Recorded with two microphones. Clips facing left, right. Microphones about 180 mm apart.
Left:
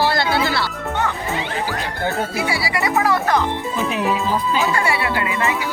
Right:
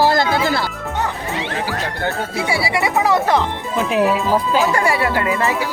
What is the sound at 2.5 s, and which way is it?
Speech, 25° right (ahead or behind).